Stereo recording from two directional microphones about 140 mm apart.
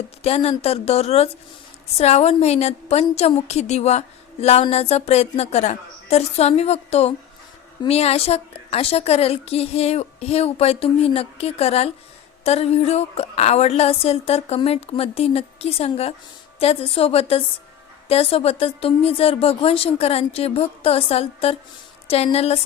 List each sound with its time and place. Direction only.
0.2 s a woman's voice: 45° left (ahead or behind)